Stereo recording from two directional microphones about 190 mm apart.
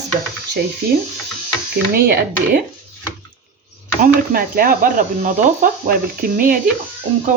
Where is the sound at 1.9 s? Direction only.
55° right (ahead or behind).